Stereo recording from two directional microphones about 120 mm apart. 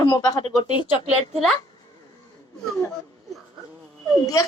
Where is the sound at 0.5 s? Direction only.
40° left (ahead or behind).